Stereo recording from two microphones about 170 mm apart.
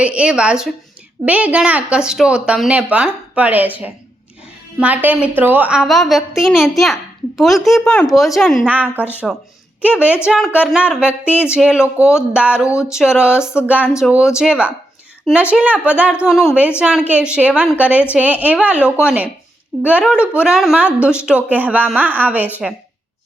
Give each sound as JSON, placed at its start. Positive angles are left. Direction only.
{"t": 0.0, "sound": "a woman's voice", "side_deg": -5}